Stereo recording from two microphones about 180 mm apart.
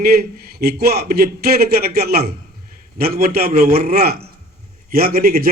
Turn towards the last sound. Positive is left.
turn(degrees=-55)  # may be behind; listen again after turning